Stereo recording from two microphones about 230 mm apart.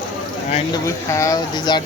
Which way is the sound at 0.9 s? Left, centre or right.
Centre.